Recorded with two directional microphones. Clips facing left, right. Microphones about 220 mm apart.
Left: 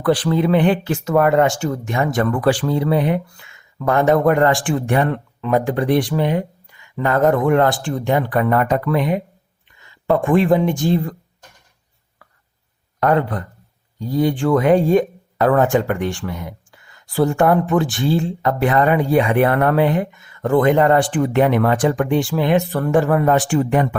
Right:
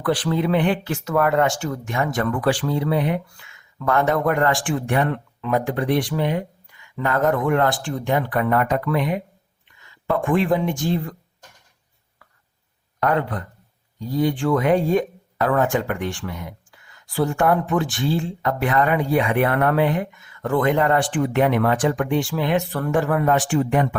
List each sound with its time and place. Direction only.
0.0 s speech: 35° left (ahead or behind)
3.8 s speech: 20° left (ahead or behind)
10.2 s speech: 35° left (ahead or behind)
13.0 s a man's voice: 40° left (ahead or behind)
14.4 s speech: 35° left (ahead or behind)
17.4 s speech: 35° left (ahead or behind)